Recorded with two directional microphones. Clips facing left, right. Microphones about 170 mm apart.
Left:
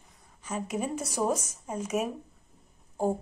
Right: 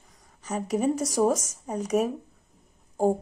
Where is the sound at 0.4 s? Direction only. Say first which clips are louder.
Right 5 dB; 40° right (ahead or behind).